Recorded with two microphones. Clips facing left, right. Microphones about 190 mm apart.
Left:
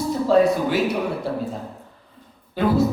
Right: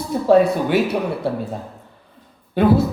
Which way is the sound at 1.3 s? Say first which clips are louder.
Right 3 dB; 60° right (ahead or behind).